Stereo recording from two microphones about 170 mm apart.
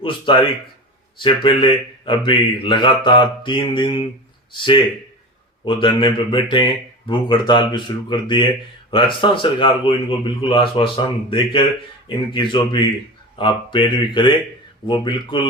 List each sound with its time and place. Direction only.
0.0 s speech: 30° left (ahead or behind)